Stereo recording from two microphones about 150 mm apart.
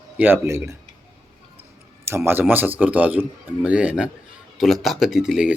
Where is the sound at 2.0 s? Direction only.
15° right (ahead or behind).